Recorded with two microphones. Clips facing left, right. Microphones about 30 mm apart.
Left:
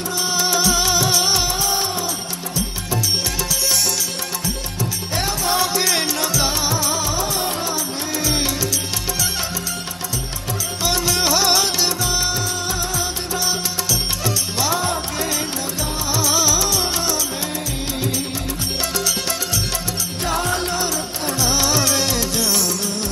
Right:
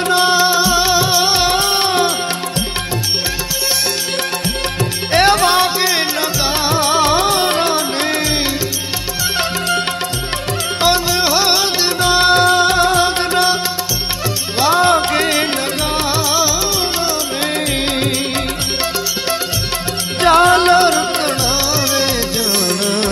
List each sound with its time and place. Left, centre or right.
0.1 s music: right
0.4 s music: right
1.5 s music: right
5.1 s music: right
5.6 s music: right
6.7 s music: right
11.1 s music: right
12.0 s music: right
14.6 s music: right
16.1 s music: right
20.2 s music: right
21.7 s music: right
22.7 s music: right